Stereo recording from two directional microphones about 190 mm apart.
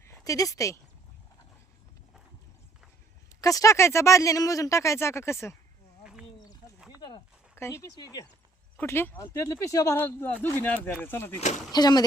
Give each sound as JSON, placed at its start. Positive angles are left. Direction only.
{"t": 0.0, "sound": "speech", "side_deg": 15}
{"t": 3.4, "sound": "speech", "side_deg": 15}
{"t": 7.5, "sound": "speech", "side_deg": 15}
{"t": 11.3, "sound": "speech", "side_deg": 40}
{"t": 11.7, "sound": "speech", "side_deg": 20}